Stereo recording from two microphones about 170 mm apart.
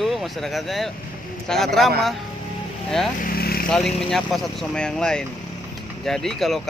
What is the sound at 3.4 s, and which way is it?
Vehicle, 65° left (ahead or behind).